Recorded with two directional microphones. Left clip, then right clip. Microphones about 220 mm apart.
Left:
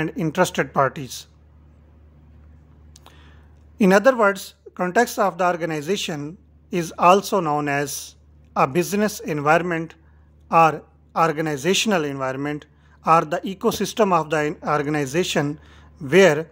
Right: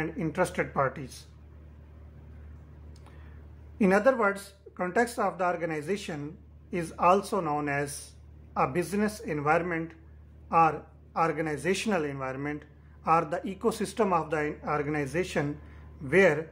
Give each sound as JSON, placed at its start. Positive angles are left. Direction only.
{"t": 0.0, "sound": "speech", "side_deg": 40}
{"t": 2.9, "sound": "a sound", "side_deg": 45}
{"t": 3.7, "sound": "speech", "side_deg": 45}